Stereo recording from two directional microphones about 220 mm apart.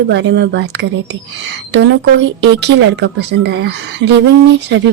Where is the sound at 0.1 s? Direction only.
50° right (ahead or behind).